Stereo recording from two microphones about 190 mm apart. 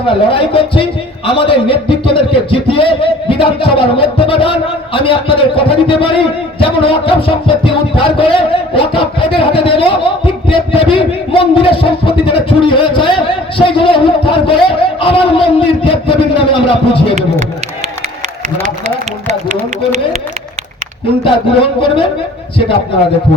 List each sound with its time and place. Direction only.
0.1 s a man's voice: 25° left (ahead or behind)
21.2 s a man's voice: 25° left (ahead or behind)